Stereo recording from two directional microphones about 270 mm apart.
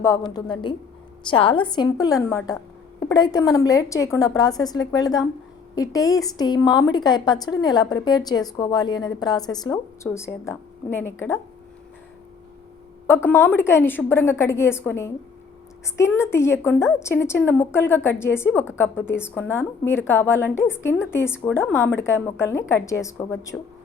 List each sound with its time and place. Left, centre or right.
0.0 s a woman's voice: centre
13.2 s a woman's voice: centre